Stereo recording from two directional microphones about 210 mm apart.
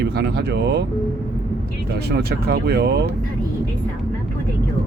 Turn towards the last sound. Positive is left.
turn(degrees=-50)  # may be behind; listen again after turning